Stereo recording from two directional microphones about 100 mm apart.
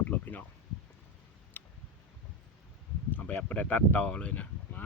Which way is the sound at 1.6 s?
20° left (ahead or behind).